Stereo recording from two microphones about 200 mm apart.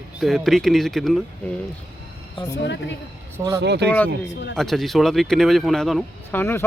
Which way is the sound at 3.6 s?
55° right (ahead or behind).